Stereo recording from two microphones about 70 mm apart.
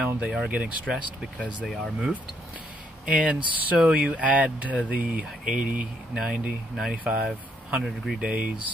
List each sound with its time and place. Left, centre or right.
0.0 s speech: centre
3.1 s speech: centre
7.8 s speech: centre
8.2 s speech: centre